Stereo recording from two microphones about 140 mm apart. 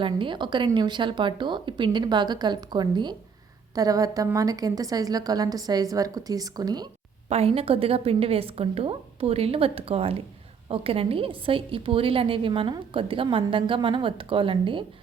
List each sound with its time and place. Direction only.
0.0 s a woman's voice: 35° right (ahead or behind)
7.3 s a woman's voice: 45° right (ahead or behind)